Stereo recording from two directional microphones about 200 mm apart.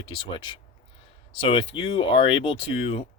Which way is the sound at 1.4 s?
25° left (ahead or behind).